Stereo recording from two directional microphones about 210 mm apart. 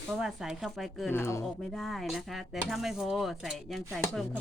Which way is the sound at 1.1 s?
15° left (ahead or behind).